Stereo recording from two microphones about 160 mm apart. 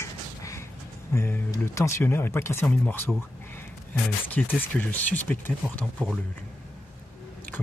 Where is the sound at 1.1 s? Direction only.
15° left (ahead or behind).